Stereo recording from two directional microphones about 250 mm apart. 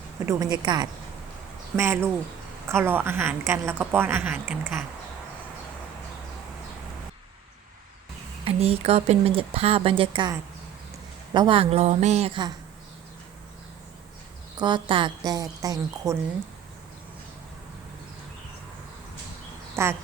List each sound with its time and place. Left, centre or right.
0.3 s speech: centre
8.4 s speech: right
11.3 s speech: right
14.6 s speech: centre
19.7 s speech: centre